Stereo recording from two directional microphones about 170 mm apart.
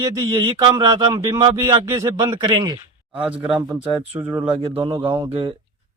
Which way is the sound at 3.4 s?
5° right (ahead or behind).